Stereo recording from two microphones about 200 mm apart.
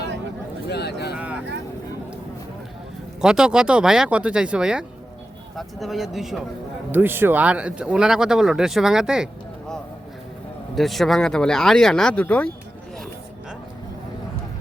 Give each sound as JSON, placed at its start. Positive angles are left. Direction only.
{"t": 0.7, "sound": "a sound", "side_deg": 55}
{"t": 1.1, "sound": "vehicle", "side_deg": -5}
{"t": 3.2, "sound": "speech", "side_deg": -5}